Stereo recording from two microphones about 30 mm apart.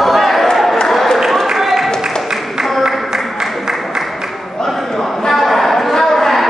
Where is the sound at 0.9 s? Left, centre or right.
Centre.